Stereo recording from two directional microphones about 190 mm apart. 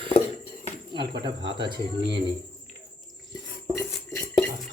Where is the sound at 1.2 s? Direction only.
25° right (ahead or behind).